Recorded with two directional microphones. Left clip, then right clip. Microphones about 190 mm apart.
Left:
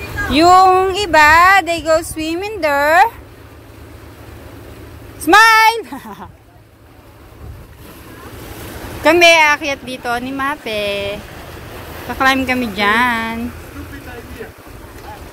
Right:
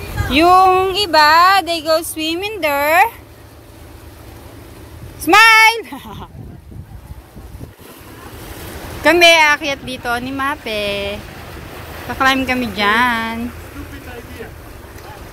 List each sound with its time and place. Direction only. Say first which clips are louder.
0.3 s speech: left 1 dB; centre (ahead or behind)
5.2 s speech: even; 5° left (ahead or behind)
9.0 s speech: even; centre (ahead or behind)
11.1 s vehicle: left 1 dB; 35° left (ahead or behind)
12.1 s speech: left 1 dB; centre (ahead or behind)
14.0 s vehicle: left 1 dB; 45° left (ahead or behind)